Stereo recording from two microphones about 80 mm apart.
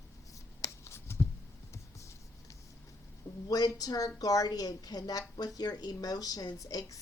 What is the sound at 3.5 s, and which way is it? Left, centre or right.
Speech, left.